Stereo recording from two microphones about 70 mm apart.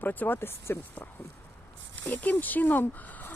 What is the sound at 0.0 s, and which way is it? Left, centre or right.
Speech, left.